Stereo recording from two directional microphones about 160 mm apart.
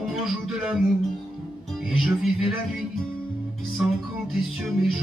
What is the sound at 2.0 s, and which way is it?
Music, centre (ahead or behind).